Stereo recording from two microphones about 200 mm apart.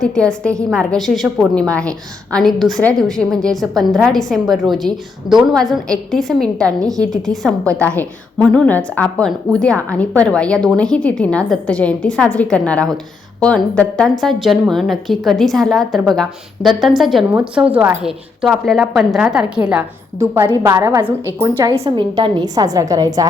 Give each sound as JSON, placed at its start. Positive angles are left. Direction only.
{"t": 0.0, "sound": "a woman's voice", "side_deg": 5}